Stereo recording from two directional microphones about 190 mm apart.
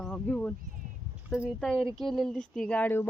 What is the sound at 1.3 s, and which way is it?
Speech, 5° right (ahead or behind).